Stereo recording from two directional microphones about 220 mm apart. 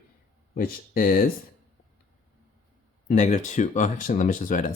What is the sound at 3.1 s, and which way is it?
Speech, 35° left (ahead or behind).